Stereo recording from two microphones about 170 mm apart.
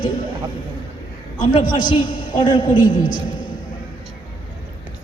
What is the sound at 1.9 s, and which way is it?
A woman's voice, 30° left (ahead or behind).